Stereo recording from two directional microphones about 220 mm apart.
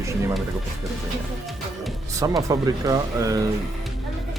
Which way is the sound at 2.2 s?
15° right (ahead or behind).